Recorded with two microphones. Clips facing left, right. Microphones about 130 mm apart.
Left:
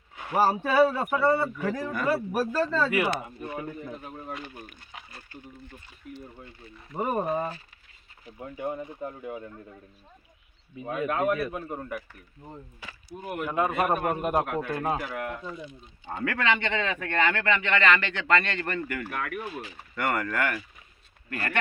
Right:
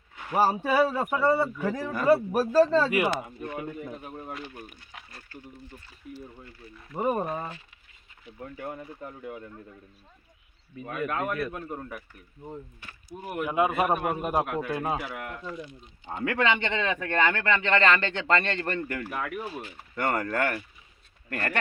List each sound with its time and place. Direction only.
0.3 s a man's voice: 5° right (ahead or behind)
1.9 s speech: 35° right (ahead or behind)
3.2 s a man's voice: 5° left (ahead or behind)
3.8 s a man's voice: 5° right (ahead or behind)
4.9 s a sound: centre (ahead or behind)
6.7 s a man's voice: centre (ahead or behind)
8.4 s speech: 15° left (ahead or behind)
10.8 s speech: 10° left (ahead or behind)
12.8 s speech: 90° left
13.2 s a man's voice: 5° right (ahead or behind)
15.2 s speech: 10° left (ahead or behind)
16.0 s speech: 20° right (ahead or behind)
19.2 s speech: 15° right (ahead or behind)
20.0 s speech: 30° right (ahead or behind)